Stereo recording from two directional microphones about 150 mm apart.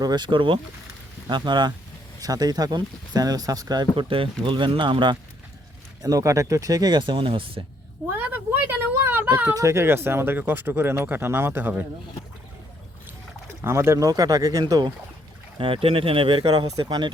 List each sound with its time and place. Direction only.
0.0 s speech: 30° right (ahead or behind)
8.3 s a sound: 15° right (ahead or behind)
9.5 s speech: 20° right (ahead or behind)
13.6 s speech: 15° right (ahead or behind)